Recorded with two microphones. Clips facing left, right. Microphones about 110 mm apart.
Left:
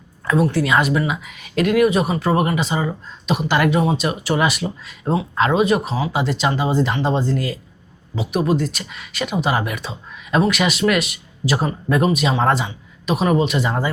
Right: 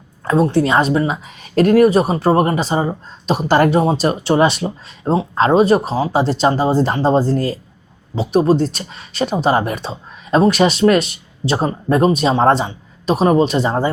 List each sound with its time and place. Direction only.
0.3 s speech: 30° right (ahead or behind)